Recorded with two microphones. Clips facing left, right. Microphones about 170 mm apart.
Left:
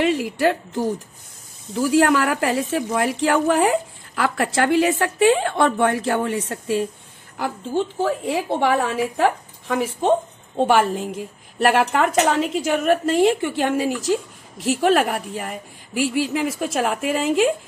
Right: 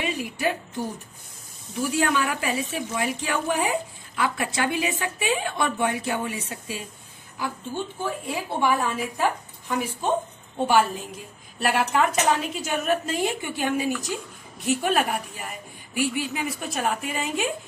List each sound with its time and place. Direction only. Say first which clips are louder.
0.0 s a woman's voice: left 8 dB; 85° left; by 6.9 s 65° left (ahead or behind)
7.3 s a woman's voice: left 7 dB; 80° left
10.7 s a woman's voice: left 2 dB; 70° left (ahead or behind)